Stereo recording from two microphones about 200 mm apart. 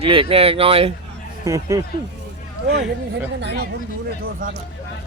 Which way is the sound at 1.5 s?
15° right (ahead or behind).